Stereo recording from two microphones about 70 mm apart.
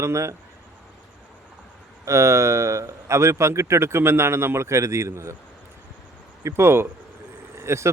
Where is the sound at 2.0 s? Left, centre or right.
Right.